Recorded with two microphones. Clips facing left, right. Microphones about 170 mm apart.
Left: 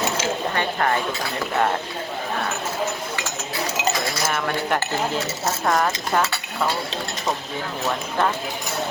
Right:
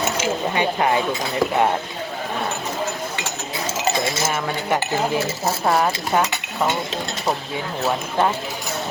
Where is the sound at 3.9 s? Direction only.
25° right (ahead or behind).